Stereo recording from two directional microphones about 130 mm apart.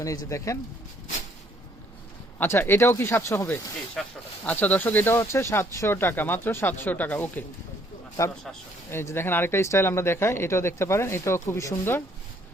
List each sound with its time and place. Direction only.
0.0 s speech: 25° left (ahead or behind)
2.4 s speech: 15° left (ahead or behind)
4.0 s speech: 5° left (ahead or behind)
8.2 s speech: 25° left (ahead or behind)